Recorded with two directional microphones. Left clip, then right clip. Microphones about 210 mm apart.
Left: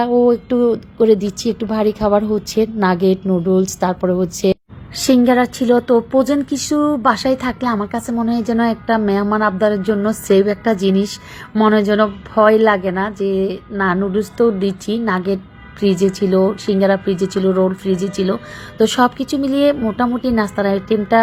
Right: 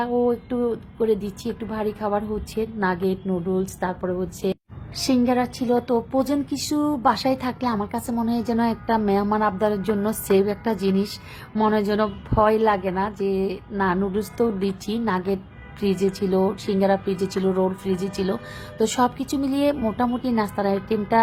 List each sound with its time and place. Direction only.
0.0 s a woman's voice: 25° left (ahead or behind)